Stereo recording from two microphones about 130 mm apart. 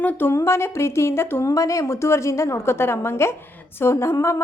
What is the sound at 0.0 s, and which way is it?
A woman's voice, 15° left (ahead or behind).